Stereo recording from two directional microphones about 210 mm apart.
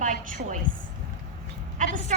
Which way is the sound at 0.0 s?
40° right (ahead or behind).